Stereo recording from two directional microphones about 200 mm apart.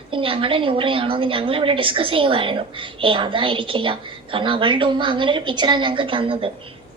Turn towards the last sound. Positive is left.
turn(degrees=-25)  # may be behind; listen again after turning